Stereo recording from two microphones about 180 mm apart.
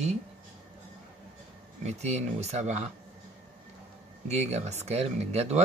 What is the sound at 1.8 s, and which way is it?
Speech, 35° right (ahead or behind).